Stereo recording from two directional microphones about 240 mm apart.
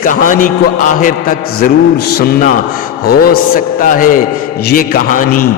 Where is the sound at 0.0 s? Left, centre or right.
Left.